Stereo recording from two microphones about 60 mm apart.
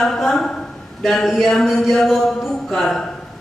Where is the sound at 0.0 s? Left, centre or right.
Centre.